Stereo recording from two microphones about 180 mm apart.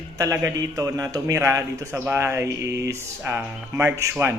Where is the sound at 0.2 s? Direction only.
20° right (ahead or behind).